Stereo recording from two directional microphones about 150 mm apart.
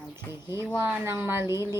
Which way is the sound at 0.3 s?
15° right (ahead or behind).